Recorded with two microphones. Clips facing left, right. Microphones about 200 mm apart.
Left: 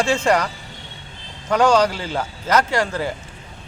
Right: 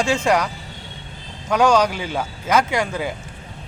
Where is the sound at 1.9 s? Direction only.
15° right (ahead or behind).